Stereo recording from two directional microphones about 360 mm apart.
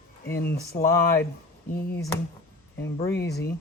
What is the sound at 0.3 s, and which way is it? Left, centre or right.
Speech, left.